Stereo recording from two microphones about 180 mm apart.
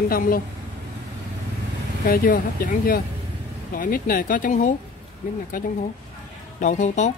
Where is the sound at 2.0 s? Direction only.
50° left (ahead or behind).